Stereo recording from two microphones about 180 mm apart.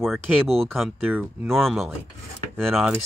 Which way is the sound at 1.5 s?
Centre (ahead or behind).